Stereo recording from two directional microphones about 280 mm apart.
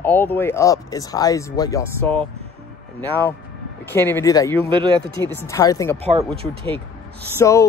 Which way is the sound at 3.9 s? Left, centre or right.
Centre.